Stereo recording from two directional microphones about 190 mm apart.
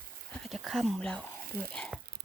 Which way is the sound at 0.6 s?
Centre (ahead or behind).